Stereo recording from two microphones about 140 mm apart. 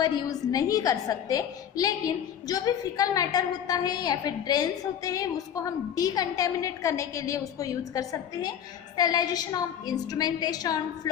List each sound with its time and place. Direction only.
0.0 s a woman's voice: 25° left (ahead or behind)